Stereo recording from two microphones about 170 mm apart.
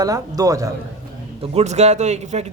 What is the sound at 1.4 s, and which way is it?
Speech, 40° right (ahead or behind).